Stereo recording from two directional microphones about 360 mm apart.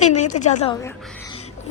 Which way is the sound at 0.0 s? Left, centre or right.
Centre.